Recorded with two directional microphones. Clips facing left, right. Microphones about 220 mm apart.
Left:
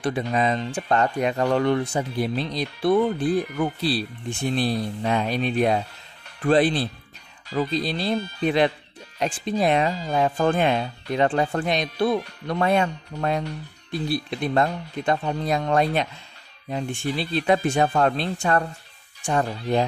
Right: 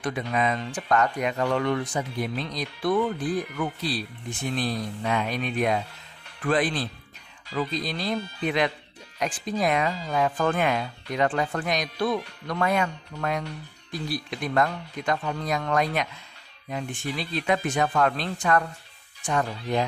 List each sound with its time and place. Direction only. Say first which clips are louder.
0.0 s speech: left 3 dB; 30° left (ahead or behind)
7.4 s speech: left 4 dB; 40° left (ahead or behind)